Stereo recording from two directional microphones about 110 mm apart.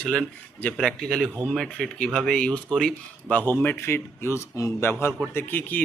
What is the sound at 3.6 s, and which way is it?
A man's voice, 20° left (ahead or behind).